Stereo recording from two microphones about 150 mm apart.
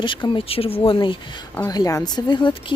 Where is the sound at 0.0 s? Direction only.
35° left (ahead or behind).